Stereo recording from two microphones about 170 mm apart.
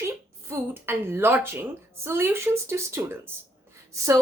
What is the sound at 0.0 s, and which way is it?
A woman's voice, 15° right (ahead or behind).